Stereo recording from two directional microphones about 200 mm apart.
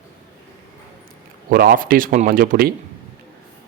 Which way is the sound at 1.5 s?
50° right (ahead or behind).